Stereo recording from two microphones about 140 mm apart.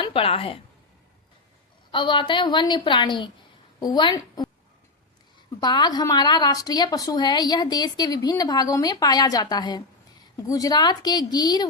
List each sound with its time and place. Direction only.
0.0 s a woman's voice: 40° left (ahead or behind)
1.9 s a woman's voice: 35° left (ahead or behind)
5.5 s a woman's voice: 30° left (ahead or behind)